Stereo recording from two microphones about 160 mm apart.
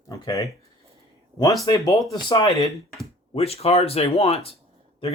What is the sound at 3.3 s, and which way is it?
Speech, 40° left (ahead or behind).